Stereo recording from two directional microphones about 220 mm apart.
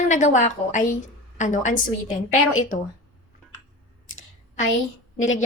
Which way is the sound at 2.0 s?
70° left (ahead or behind).